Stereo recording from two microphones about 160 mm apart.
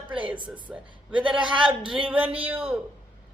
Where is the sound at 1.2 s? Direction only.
30° right (ahead or behind).